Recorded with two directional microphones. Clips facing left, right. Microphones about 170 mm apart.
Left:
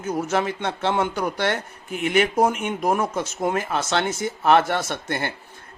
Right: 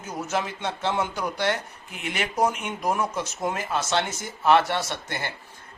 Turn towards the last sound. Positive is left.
turn(degrees=55)  # may be behind; listen again after turning